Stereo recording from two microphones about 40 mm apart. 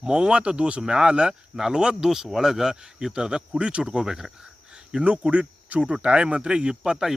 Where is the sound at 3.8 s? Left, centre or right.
Centre.